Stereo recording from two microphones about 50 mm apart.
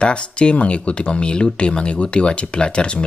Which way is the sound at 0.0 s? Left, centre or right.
Left.